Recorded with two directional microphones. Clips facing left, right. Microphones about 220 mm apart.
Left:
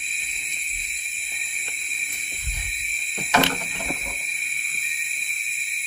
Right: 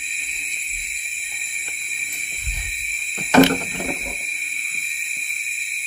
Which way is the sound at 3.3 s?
45° right (ahead or behind).